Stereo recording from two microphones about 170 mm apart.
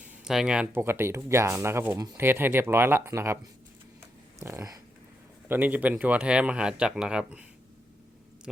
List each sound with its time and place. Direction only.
0.0 s speech: 5° right (ahead or behind)
4.4 s speech: 15° right (ahead or behind)